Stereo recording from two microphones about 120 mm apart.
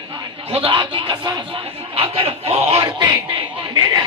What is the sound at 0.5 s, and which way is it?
Speech, 45° right (ahead or behind).